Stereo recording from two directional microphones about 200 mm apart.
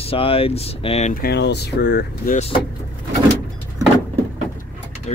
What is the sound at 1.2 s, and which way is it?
Speech, 60° left (ahead or behind).